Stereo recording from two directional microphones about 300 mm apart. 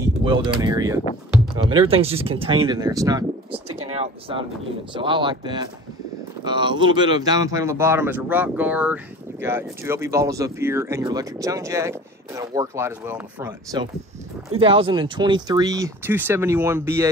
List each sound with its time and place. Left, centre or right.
0.2 s speech: centre